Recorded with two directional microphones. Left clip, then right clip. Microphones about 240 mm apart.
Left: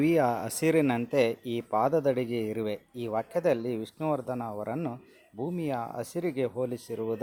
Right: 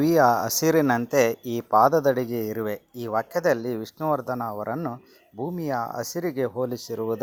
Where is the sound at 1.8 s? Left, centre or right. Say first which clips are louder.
Right 7 dB; centre.